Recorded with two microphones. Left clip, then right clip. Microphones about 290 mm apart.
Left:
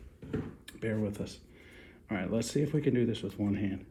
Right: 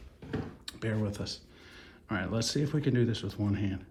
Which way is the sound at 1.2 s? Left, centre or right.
Centre.